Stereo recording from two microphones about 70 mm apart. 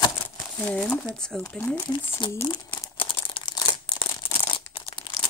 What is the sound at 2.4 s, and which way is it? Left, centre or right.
Crumpling, left.